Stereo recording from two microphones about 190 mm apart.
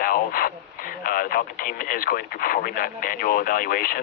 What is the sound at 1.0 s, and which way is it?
Speech, 50° left (ahead or behind).